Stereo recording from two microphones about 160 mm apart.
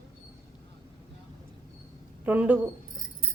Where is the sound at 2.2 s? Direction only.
10° right (ahead or behind).